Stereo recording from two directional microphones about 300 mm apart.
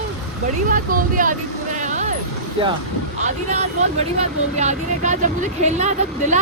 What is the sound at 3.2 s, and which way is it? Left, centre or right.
Speech, right.